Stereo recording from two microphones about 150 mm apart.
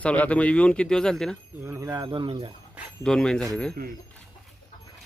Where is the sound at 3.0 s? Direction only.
5° left (ahead or behind).